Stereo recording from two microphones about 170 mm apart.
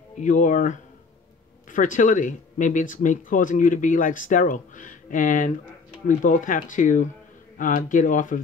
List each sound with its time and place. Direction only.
0.2 s speech: 50° left (ahead or behind)